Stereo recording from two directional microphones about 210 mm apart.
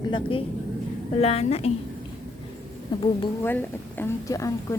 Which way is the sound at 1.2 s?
30° left (ahead or behind).